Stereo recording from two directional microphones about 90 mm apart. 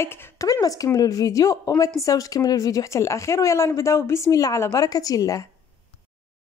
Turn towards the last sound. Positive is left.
turn(degrees=40)  # may be behind; listen again after turning